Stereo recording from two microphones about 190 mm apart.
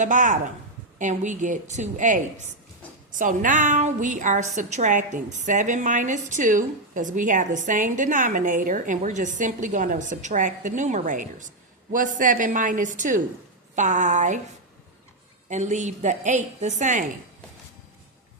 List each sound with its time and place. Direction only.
0.0 s a woman's voice: 40° right (ahead or behind)
15.4 s a woman's voice: 40° right (ahead or behind)